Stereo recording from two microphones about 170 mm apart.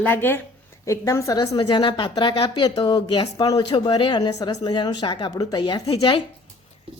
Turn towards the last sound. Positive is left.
turn(degrees=30)  # may be behind; listen again after turning